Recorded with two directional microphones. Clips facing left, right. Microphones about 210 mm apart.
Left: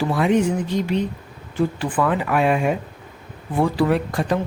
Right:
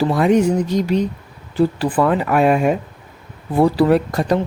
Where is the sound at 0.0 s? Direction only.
40° right (ahead or behind).